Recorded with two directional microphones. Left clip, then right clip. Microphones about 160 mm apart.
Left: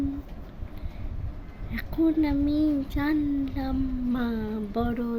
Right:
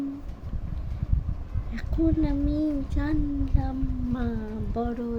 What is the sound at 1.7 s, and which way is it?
A child's voice, 10° left (ahead or behind).